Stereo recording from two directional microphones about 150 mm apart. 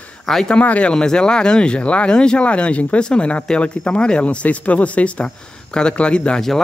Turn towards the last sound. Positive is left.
turn(degrees=5)  # may be behind; listen again after turning